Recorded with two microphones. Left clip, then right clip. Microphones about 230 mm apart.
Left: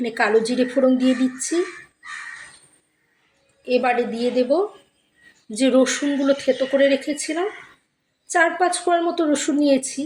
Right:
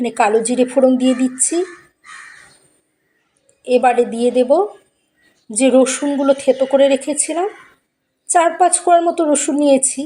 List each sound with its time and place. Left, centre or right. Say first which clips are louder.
0.0 s speech: right 4 dB; centre
3.6 s speech: right 6 dB; centre